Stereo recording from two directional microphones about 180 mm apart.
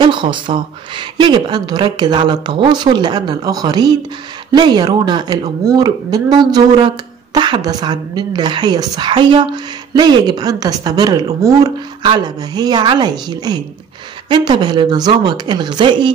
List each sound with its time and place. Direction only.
0.0 s a woman's voice: 25° right (ahead or behind)